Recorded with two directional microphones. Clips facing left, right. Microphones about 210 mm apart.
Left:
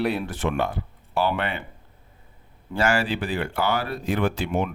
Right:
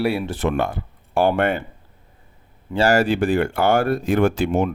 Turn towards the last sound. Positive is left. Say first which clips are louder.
# right 6 dB
turn(degrees=-45)  # may be behind; listen again after turning